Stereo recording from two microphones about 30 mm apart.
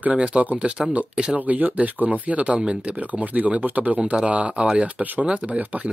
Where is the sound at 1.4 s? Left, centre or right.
Right.